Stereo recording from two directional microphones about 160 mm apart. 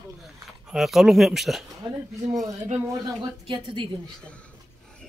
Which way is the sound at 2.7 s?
35° right (ahead or behind).